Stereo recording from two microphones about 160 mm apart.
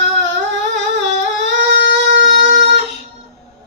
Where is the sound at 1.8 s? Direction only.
90° right.